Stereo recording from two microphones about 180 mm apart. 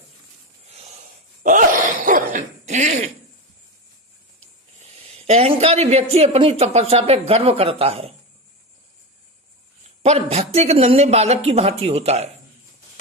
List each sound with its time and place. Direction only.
0.7 s a sound: 35° right (ahead or behind)
1.5 s throat clearing: 45° right (ahead or behind)
4.8 s speech: 35° right (ahead or behind)
10.0 s speech: 35° right (ahead or behind)